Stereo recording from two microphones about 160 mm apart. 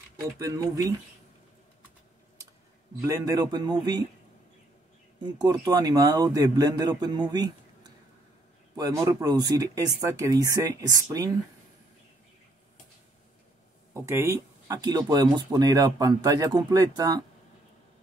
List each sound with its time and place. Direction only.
0.4 s speech: 20° right (ahead or behind)
3.1 s speech: 25° right (ahead or behind)
5.2 s speech: 25° right (ahead or behind)
13.9 s speech: 15° right (ahead or behind)